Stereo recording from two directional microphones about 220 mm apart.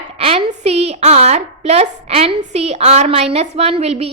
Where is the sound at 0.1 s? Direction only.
25° right (ahead or behind).